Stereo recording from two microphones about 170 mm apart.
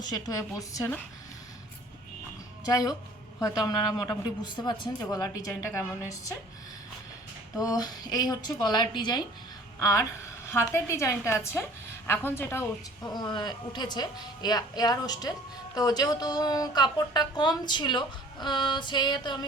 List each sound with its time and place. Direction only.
0.0 s a woman's voice: 20° left (ahead or behind)
2.6 s a woman's voice: 20° left (ahead or behind)
7.6 s a woman's voice: 20° left (ahead or behind)